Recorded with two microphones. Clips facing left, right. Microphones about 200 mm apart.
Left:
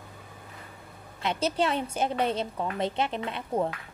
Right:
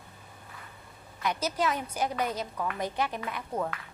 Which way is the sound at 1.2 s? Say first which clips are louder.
Left 3 dB; 25° left (ahead or behind).